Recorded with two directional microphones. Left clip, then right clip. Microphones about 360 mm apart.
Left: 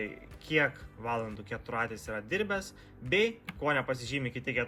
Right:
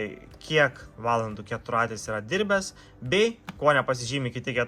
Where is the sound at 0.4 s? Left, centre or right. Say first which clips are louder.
Right 6 dB; centre.